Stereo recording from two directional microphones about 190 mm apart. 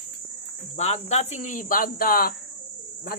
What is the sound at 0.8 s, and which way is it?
Speech, 35° left (ahead or behind).